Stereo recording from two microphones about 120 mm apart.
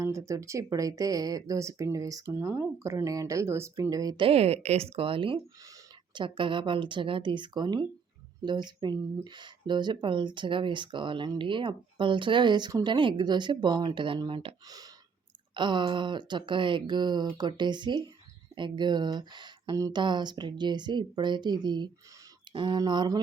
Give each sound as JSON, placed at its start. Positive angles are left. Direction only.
{"t": 0.0, "sound": "speech", "side_deg": -25}
{"t": 4.2, "sound": "speech", "side_deg": -55}